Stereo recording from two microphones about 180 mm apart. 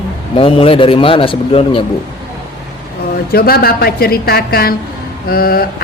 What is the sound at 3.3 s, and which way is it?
Music, 55° left (ahead or behind).